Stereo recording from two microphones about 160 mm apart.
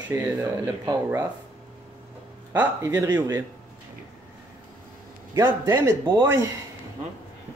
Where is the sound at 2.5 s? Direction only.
10° right (ahead or behind).